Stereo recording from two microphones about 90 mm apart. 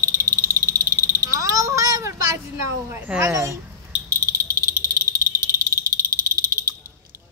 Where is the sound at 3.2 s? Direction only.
35° right (ahead or behind).